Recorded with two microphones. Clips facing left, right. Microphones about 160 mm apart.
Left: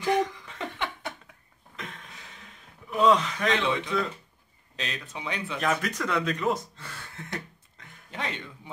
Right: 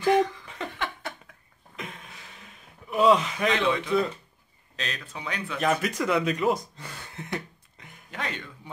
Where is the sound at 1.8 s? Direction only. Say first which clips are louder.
Right 2 dB; 10° right (ahead or behind).